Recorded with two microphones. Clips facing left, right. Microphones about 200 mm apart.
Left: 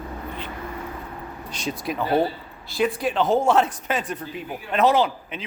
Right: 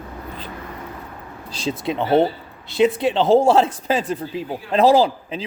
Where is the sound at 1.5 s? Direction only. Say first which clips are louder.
Right 5 dB; 30° right (ahead or behind).